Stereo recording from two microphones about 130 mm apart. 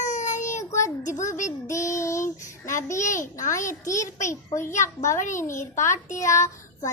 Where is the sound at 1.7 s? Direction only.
25° left (ahead or behind).